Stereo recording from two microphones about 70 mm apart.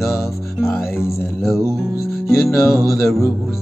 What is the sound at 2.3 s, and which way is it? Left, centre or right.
Music, left.